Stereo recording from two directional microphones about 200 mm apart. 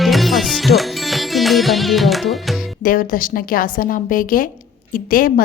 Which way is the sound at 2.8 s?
45° left (ahead or behind).